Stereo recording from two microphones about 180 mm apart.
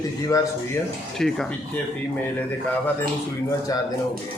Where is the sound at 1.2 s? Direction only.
5° left (ahead or behind).